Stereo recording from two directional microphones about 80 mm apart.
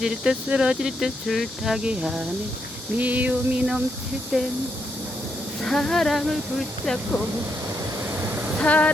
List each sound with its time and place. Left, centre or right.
0.0 s speech: centre
3.0 s a sound: centre
4.3 s speech: centre
5.6 s speech: centre
8.5 s vehicle: centre